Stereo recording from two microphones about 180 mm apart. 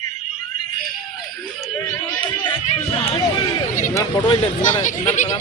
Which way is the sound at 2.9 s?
30° left (ahead or behind).